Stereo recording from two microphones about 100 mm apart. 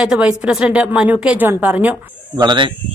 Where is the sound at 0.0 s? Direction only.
10° right (ahead or behind).